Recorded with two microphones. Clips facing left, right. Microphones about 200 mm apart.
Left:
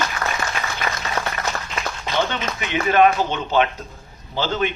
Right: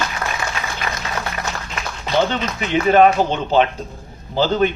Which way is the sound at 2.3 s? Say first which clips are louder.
Right 4 dB; 35° right (ahead or behind).